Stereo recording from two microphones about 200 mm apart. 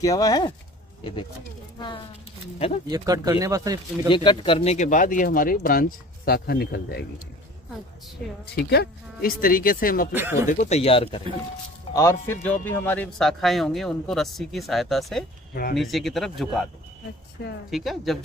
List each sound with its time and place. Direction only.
0.0 s speech: 20° left (ahead or behind)
2.9 s speech: 15° right (ahead or behind)
4.1 s speech: 25° left (ahead or behind); by 7.1 s 50° left (ahead or behind)
8.6 s speech: 50° left (ahead or behind)
10.1 s speech: 10° right (ahead or behind)
10.5 s speech: 35° left (ahead or behind)
11.9 s speech: 15° left (ahead or behind)
15.5 s speech: 50° left (ahead or behind)
15.8 s speech: centre (ahead or behind)
17.6 s speech: centre (ahead or behind)